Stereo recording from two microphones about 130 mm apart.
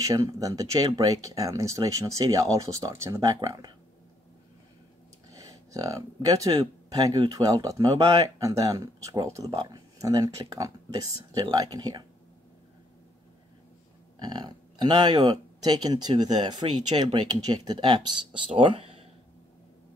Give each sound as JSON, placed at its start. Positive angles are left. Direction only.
{"t": 0.0, "sound": "speech", "side_deg": -25}
{"t": 5.3, "sound": "speech", "side_deg": -25}
{"t": 14.2, "sound": "speech", "side_deg": -35}